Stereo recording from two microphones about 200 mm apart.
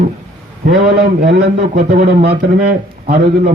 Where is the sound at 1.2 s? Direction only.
50° right (ahead or behind).